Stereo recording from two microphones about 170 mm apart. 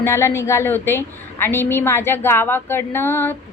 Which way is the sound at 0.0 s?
15° left (ahead or behind).